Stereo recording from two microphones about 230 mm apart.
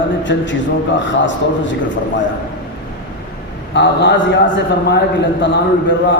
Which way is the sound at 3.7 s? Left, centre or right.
Left.